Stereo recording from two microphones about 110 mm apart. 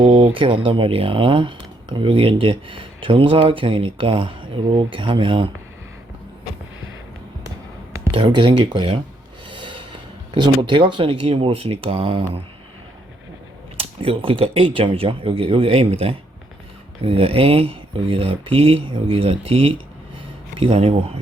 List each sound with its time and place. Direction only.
0.0 s speech: 55° right (ahead or behind)
8.1 s speech: 50° right (ahead or behind)
13.7 s speech: 60° right (ahead or behind)